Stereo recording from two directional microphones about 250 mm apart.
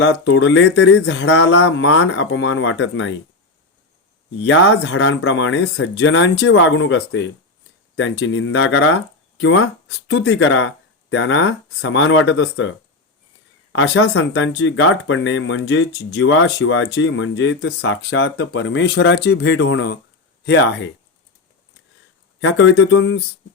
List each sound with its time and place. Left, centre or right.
0.0 s speech: left
1.2 s speech: left
4.4 s speech: left
13.7 s speech: left
22.4 s speech: left